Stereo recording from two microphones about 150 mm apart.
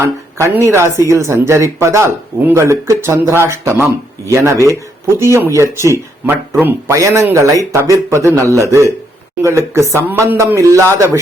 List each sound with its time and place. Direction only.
0.0 s a woman's voice: 15° right (ahead or behind)